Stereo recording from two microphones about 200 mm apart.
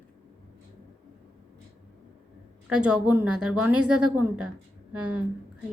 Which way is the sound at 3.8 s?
90° right.